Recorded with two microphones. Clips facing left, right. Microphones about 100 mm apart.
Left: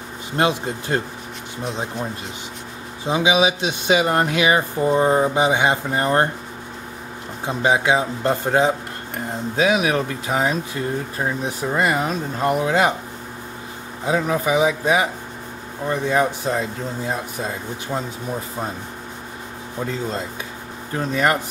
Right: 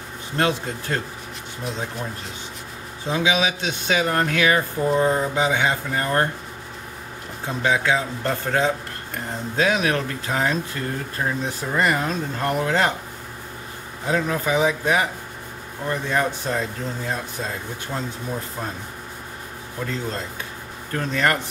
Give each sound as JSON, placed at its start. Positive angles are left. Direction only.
{"t": 0.4, "sound": "speech", "side_deg": 20}
{"t": 3.1, "sound": "speech", "side_deg": 20}
{"t": 7.4, "sound": "speech", "side_deg": 20}
{"t": 14.0, "sound": "speech", "side_deg": 15}
{"t": 17.9, "sound": "speech", "side_deg": 15}
{"t": 19.9, "sound": "speech", "side_deg": 15}